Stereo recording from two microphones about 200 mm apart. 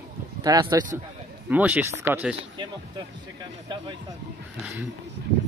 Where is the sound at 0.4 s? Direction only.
20° right (ahead or behind).